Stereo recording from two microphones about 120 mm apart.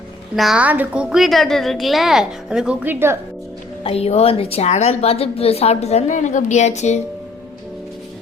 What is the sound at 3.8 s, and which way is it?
A woman's voice, 60° left (ahead or behind).